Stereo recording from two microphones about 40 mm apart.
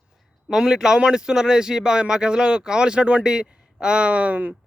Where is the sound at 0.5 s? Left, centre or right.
Centre.